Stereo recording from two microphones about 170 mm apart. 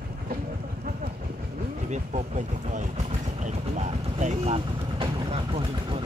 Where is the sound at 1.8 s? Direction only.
45° right (ahead or behind).